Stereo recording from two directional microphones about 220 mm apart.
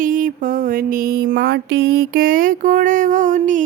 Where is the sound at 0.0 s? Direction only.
40° right (ahead or behind).